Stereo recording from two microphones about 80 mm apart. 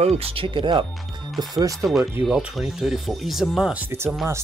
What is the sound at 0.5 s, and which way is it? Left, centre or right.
Speech, right.